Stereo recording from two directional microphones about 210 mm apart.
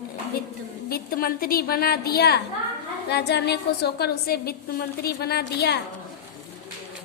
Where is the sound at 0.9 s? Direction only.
45° left (ahead or behind).